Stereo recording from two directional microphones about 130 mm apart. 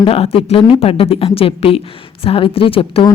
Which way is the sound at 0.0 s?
50° left (ahead or behind).